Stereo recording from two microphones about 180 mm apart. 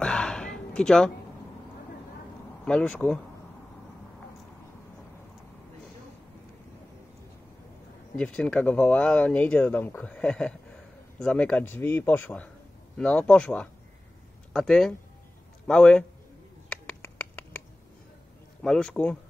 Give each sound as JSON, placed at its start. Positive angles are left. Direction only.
{"t": 0.0, "sound": "a sound", "side_deg": 5}
{"t": 2.6, "sound": "speech", "side_deg": 5}
{"t": 8.2, "sound": "speech", "side_deg": 5}
{"t": 16.6, "sound": "finger snapping", "side_deg": 5}
{"t": 18.6, "sound": "speech", "side_deg": 5}